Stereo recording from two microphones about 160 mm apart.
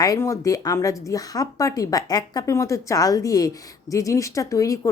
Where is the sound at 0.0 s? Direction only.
20° left (ahead or behind).